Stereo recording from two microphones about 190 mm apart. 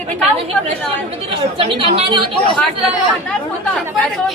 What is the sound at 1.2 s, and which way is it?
Speech, 30° right (ahead or behind).